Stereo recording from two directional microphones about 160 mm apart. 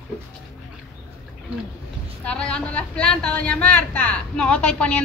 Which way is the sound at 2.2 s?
5° left (ahead or behind).